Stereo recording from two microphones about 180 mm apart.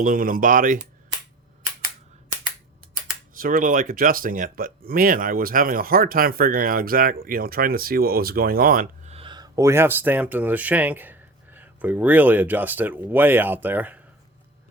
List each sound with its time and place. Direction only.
0.0 s speech: 50° right (ahead or behind)
3.3 s speech: 50° right (ahead or behind)
9.0 s speech: 30° right (ahead or behind); by 14.0 s 10° right (ahead or behind)